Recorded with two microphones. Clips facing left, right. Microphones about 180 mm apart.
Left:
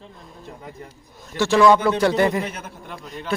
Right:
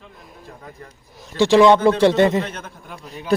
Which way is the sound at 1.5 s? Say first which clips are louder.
Right 3 dB; 25° right (ahead or behind).